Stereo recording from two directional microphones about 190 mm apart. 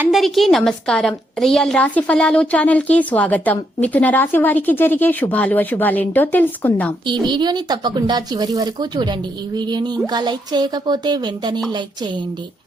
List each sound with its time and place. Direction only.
0.0 s a woman's voice: centre (ahead or behind)
7.1 s speech: 25° right (ahead or behind)